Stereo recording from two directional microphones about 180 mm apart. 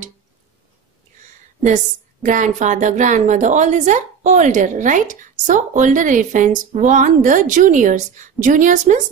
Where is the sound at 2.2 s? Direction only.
45° right (ahead or behind).